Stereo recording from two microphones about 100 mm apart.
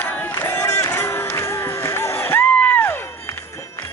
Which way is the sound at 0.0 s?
20° left (ahead or behind).